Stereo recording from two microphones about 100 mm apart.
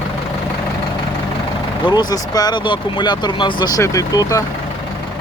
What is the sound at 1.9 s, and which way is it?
Speech, 45° left (ahead or behind).